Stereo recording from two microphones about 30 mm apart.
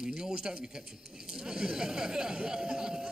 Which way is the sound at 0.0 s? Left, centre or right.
Right.